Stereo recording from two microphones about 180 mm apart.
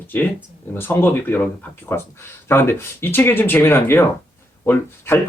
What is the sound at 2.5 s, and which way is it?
Speech, 15° left (ahead or behind).